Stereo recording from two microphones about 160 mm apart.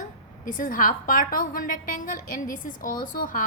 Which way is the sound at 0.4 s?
60° left (ahead or behind).